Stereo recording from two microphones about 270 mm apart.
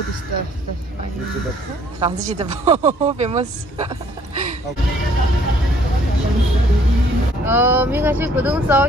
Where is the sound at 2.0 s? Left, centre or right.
Right.